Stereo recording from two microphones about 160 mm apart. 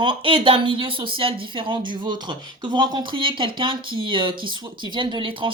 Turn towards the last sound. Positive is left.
turn(degrees=-30)  # may be behind; listen again after turning